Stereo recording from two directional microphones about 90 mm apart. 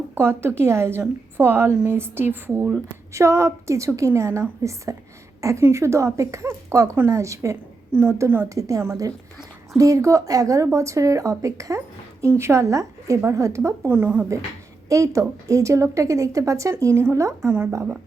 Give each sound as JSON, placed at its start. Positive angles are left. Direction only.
{"t": 0.1, "sound": "a woman's voice", "side_deg": -25}
{"t": 3.1, "sound": "speech", "side_deg": -35}
{"t": 8.4, "sound": "speech", "side_deg": -40}
{"t": 14.8, "sound": "speech", "side_deg": -35}